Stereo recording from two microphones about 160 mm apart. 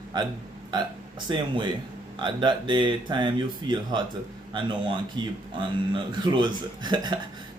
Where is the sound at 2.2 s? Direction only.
30° right (ahead or behind).